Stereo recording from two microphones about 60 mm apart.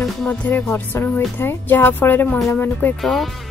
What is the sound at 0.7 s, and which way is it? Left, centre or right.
A woman's voice, left.